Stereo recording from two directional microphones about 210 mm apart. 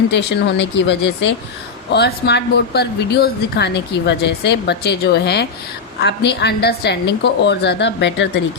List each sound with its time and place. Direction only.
0.1 s speech: 55° left (ahead or behind)